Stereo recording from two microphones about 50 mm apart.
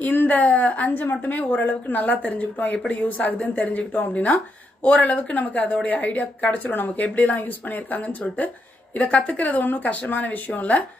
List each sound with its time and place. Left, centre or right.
0.0 s speech: left